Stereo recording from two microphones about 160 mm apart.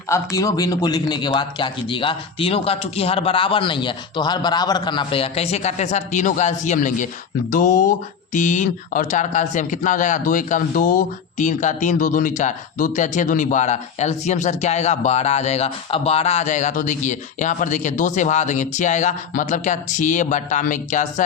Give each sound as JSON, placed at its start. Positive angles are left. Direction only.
{"t": 0.1, "sound": "speech", "side_deg": 20}